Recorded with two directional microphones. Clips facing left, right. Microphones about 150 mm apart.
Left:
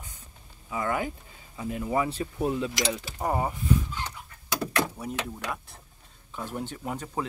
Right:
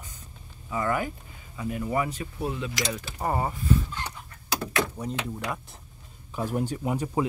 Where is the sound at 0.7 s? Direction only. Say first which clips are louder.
Right 1 dB; 15° left (ahead or behind).